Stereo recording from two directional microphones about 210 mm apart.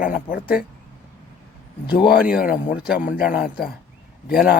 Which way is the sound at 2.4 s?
40° left (ahead or behind).